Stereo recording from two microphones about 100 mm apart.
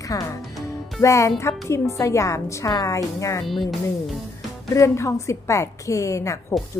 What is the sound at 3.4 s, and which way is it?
Speech, centre (ahead or behind).